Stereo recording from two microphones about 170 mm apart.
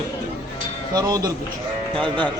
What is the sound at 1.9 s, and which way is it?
Speech, 10° left (ahead or behind).